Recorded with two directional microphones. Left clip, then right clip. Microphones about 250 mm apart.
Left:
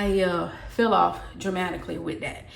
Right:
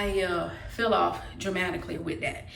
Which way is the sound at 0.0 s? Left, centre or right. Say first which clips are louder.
Left 4 dB; centre.